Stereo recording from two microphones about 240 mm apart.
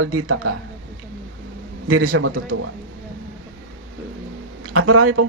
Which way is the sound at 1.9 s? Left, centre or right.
Right.